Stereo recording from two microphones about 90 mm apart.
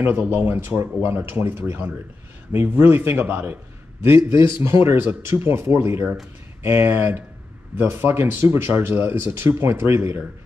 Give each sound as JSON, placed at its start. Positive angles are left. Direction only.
{"t": 0.0, "sound": "speech", "side_deg": -25}